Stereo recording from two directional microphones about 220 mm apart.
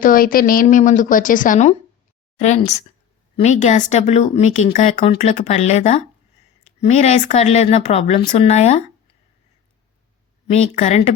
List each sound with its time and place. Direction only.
0.0 s speech: 40° left (ahead or behind)
10.5 s speech: 30° left (ahead or behind)